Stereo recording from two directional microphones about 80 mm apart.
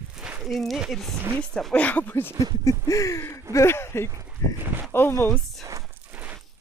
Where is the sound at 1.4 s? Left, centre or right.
Centre.